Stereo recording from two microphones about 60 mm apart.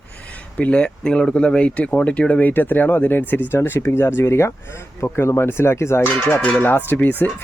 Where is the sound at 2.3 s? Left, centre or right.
Left.